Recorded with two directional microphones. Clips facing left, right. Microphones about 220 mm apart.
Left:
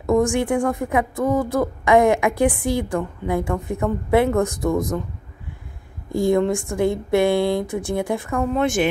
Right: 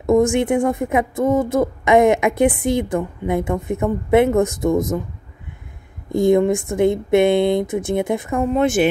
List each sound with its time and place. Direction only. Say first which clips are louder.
0.0 s speech: right 3 dB; 20° right (ahead or behind)
6.1 s speech: right 4 dB; 20° right (ahead or behind)